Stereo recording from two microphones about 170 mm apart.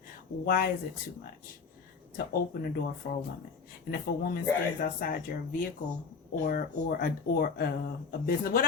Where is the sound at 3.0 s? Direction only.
70° left (ahead or behind).